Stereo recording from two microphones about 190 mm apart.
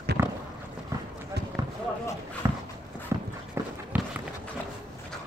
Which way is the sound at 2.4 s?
15° right (ahead or behind).